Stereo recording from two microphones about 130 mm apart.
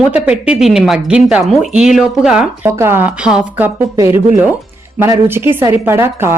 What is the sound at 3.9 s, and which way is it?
A woman's voice, 20° right (ahead or behind).